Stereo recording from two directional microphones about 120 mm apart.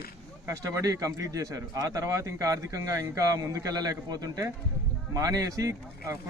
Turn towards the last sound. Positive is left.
turn(degrees=-30)  # may be behind; listen again after turning